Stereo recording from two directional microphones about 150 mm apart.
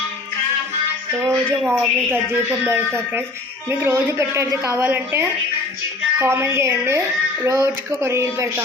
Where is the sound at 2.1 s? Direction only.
15° right (ahead or behind).